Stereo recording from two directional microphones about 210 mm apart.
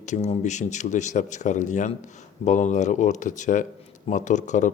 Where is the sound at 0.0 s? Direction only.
35° left (ahead or behind).